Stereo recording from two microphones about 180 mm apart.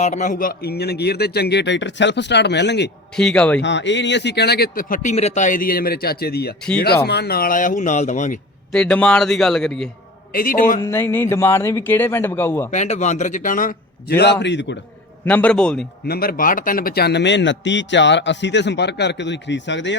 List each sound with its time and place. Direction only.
0.0 s a man's voice: 45° left (ahead or behind); by 2.9 s 70° left (ahead or behind)
3.2 s speech: 5° left (ahead or behind)
3.6 s a man's voice: 85° left; by 8.4 s 45° left (ahead or behind)
8.7 s a man's voice: 5° left (ahead or behind)
10.3 s a man's voice: 50° left (ahead or behind)
10.8 s speech: 10° left (ahead or behind)
12.7 s a man's voice: 40° left (ahead or behind); by 14.3 s 65° left (ahead or behind)
14.4 s a man's voice: 75° left (ahead or behind)
15.2 s speech: 10° left (ahead or behind)
16.0 s a man's voice: 55° left (ahead or behind); by 20.0 s 80° left